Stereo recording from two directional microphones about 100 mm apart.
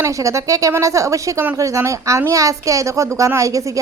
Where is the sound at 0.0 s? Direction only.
30° right (ahead or behind).